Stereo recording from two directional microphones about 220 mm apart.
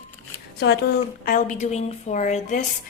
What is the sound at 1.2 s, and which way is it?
A woman's voice, 35° left (ahead or behind).